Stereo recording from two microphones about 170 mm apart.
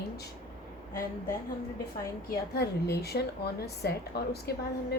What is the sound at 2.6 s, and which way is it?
Speech, 70° left (ahead or behind).